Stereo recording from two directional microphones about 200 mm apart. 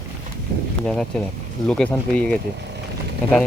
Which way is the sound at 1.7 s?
5° left (ahead or behind).